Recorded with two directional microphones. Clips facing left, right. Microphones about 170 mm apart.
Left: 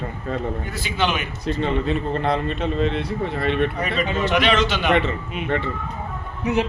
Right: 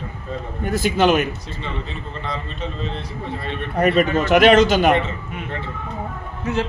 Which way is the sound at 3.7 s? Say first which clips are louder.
Right 7 dB; 55° right (ahead or behind).